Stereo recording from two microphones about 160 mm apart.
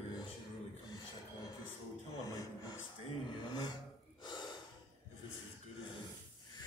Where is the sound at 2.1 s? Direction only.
25° left (ahead or behind).